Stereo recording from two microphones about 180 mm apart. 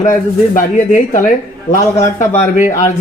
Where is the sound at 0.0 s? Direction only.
45° left (ahead or behind).